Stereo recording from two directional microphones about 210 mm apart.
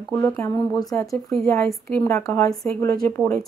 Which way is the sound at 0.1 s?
10° left (ahead or behind).